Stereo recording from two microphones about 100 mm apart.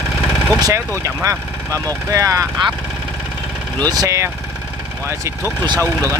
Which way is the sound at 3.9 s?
35° right (ahead or behind).